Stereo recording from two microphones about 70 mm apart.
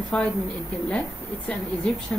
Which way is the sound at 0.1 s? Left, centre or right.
Centre.